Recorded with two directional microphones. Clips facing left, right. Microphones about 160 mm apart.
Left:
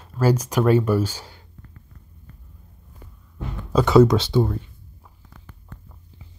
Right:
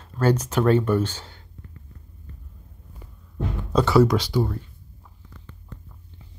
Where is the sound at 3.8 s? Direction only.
20° left (ahead or behind).